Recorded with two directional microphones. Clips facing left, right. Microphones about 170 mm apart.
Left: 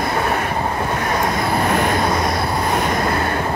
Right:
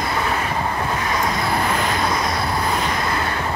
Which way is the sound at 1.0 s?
50° left (ahead or behind).